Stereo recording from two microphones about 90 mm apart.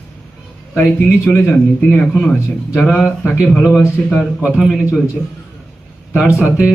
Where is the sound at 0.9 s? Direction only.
20° left (ahead or behind).